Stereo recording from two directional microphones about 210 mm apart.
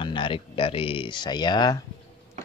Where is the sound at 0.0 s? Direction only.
25° left (ahead or behind).